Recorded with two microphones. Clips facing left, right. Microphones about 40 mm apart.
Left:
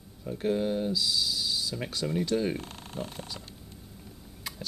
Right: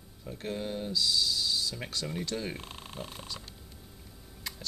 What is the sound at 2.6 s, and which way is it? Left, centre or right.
Speech, centre.